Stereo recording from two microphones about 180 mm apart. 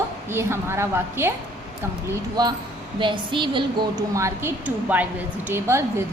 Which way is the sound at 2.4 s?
20° right (ahead or behind).